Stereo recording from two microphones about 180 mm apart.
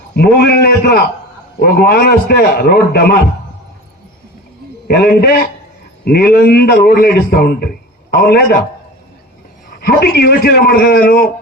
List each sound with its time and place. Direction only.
0.1 s a man's voice: 65° left (ahead or behind)
4.9 s a man's voice: 60° left (ahead or behind)
9.6 s a man's voice: 60° left (ahead or behind)